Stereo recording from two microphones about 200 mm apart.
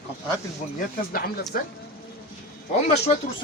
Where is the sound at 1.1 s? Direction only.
45° left (ahead or behind).